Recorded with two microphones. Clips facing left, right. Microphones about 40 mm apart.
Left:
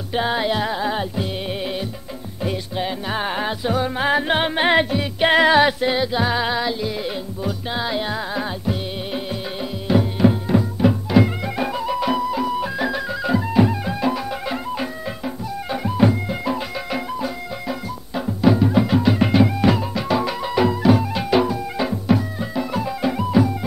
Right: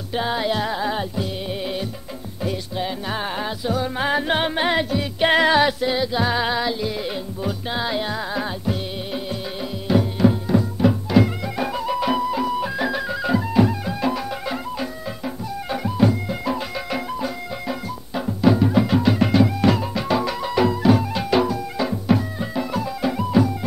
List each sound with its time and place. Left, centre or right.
0.1 s music: left
2.4 s music: left
3.9 s music: centre
4.6 s music: left
5.2 s music: centre
6.1 s music: centre
9.8 s music: centre
16.0 s music: left
16.4 s music: centre
22.0 s music: centre
23.0 s music: centre